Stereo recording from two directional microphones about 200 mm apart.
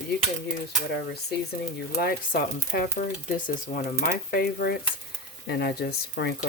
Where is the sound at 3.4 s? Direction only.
45° left (ahead or behind).